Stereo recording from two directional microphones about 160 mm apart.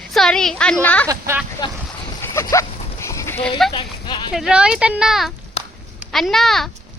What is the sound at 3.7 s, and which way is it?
Speech, 30° left (ahead or behind).